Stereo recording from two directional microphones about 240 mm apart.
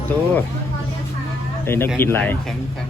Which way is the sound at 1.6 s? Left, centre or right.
Centre.